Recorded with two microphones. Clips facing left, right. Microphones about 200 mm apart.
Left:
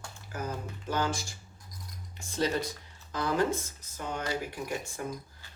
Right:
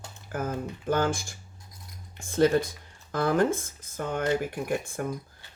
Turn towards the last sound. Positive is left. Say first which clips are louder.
# right 6 dB
turn(degrees=-55)  # may be behind; listen again after turning